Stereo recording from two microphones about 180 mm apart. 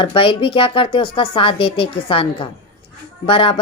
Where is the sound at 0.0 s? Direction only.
30° left (ahead or behind).